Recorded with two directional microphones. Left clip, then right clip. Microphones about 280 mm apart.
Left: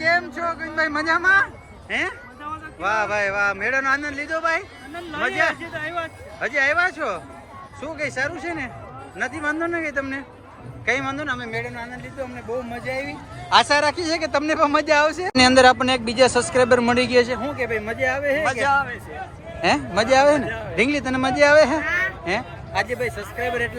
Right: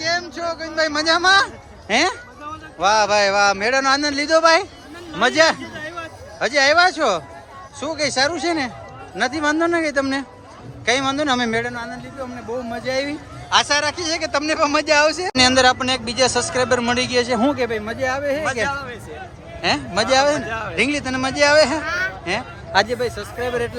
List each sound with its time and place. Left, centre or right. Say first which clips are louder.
0.0 s a sound: left 2 dB; centre
1.9 s a man's voice: right 7 dB; centre
11.3 s speech: right 8 dB; right
11.6 s speech: right 4 dB; centre
13.5 s a man's voice: left 1 dB; centre
19.6 s a man's voice: even; centre